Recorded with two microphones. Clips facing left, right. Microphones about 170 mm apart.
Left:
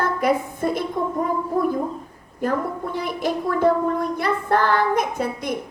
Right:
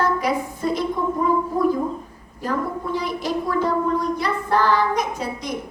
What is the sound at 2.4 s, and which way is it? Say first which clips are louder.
A woman's voice: left 2 dB; 55° left (ahead or behind).